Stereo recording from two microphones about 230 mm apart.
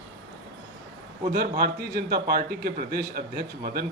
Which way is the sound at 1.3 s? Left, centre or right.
Right.